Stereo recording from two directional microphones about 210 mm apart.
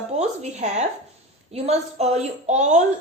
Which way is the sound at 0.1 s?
30° right (ahead or behind).